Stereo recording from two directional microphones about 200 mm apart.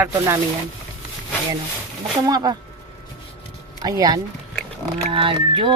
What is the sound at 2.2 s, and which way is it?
Speech, 20° right (ahead or behind).